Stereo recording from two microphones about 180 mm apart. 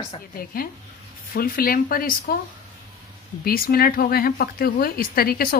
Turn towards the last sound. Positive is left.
turn(degrees=55)  # may be behind; listen again after turning